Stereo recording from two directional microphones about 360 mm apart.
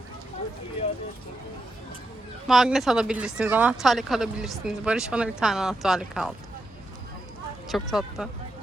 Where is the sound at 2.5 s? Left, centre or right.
Centre.